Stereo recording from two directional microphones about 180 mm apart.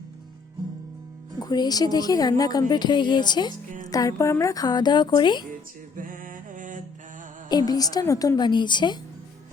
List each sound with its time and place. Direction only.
1.4 s a woman's voice: 20° left (ahead or behind)
6.0 s music: 50° right (ahead or behind)
7.5 s a woman's voice: 20° left (ahead or behind)